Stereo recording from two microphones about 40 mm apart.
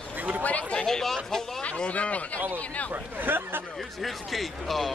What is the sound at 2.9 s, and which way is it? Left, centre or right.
Speech, right.